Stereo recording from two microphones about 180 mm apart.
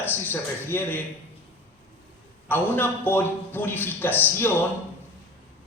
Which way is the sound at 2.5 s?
10° left (ahead or behind).